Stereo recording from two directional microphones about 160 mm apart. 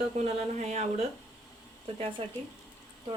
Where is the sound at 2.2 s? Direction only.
35° right (ahead or behind).